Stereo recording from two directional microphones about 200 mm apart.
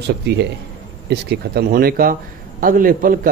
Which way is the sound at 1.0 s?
55° right (ahead or behind).